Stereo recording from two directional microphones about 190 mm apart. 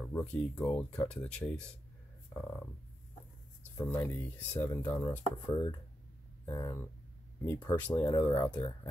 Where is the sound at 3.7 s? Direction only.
15° left (ahead or behind).